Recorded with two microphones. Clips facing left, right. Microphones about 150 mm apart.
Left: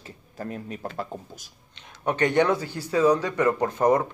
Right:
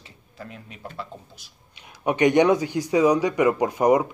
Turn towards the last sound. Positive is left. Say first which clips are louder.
# right 2 dB
turn(degrees=-10)  # may be behind; listen again after turning